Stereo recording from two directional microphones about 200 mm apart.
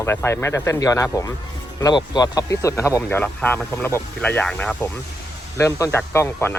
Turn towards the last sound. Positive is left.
turn(degrees=10)  # may be behind; listen again after turning